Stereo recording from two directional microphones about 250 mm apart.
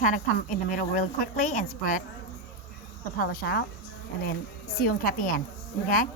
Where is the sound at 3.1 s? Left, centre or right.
Left.